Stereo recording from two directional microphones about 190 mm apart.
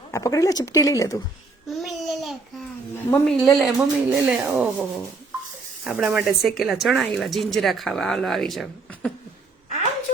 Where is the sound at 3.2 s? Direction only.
Centre (ahead or behind).